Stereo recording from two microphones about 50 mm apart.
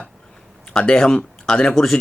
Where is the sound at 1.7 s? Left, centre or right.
Centre.